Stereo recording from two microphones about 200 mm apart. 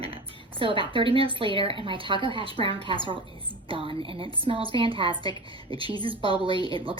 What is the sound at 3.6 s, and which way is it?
A woman's voice, 25° right (ahead or behind).